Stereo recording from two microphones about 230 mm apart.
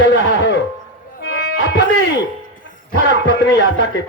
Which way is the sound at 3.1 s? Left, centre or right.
Left.